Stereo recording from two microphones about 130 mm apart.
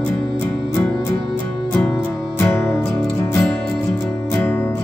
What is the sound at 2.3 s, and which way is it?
Music, 15° left (ahead or behind).